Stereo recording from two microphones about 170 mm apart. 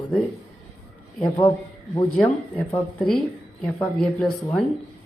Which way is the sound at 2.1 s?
10° left (ahead or behind).